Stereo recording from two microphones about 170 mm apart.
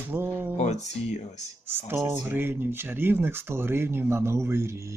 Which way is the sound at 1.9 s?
10° right (ahead or behind).